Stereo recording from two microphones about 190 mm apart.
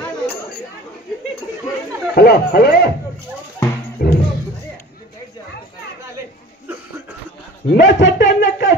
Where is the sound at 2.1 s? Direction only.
60° left (ahead or behind).